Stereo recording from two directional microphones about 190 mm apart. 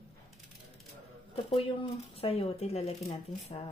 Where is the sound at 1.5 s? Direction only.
30° left (ahead or behind).